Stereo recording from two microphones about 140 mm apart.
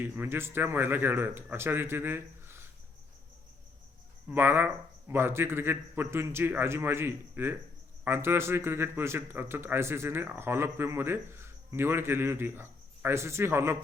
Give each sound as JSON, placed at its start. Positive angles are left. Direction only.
{"t": 0.0, "sound": "speech", "side_deg": -15}
{"t": 4.3, "sound": "speech", "side_deg": -15}